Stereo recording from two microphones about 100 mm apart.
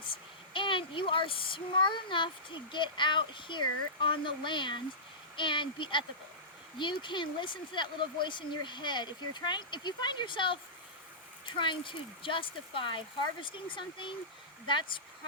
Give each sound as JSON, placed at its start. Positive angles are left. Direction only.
{"t": 0.5, "sound": "speech", "side_deg": 55}